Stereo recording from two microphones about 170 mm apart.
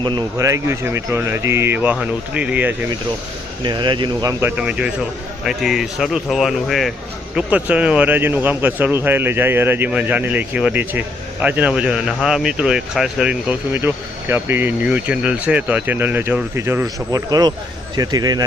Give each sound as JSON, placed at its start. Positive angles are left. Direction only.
{"t": 0.0, "sound": "a man's voice", "side_deg": -25}
{"t": 3.6, "sound": "a man's voice", "side_deg": -25}